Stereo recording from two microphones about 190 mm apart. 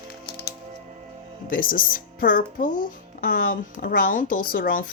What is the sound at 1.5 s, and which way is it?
A woman's voice, 45° left (ahead or behind).